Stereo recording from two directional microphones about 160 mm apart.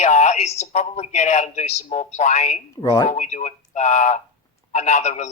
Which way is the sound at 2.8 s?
25° left (ahead or behind).